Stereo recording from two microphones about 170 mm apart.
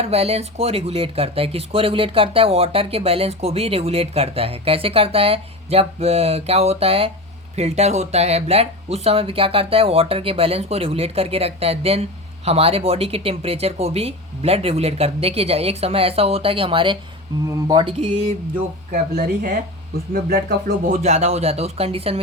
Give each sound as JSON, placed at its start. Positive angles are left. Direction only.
{"t": 0.0, "sound": "speech", "side_deg": -35}
{"t": 18.9, "sound": "speech", "side_deg": -50}
{"t": 19.3, "sound": "music", "side_deg": -55}
{"t": 20.9, "sound": "speech", "side_deg": -40}